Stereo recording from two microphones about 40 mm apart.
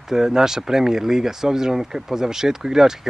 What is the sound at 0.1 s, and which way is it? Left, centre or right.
Speech, centre.